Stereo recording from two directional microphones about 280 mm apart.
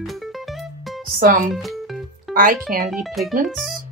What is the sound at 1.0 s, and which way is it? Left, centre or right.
Speech, right.